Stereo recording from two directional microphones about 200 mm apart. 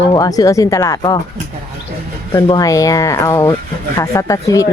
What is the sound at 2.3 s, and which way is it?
Speech, 20° left (ahead or behind).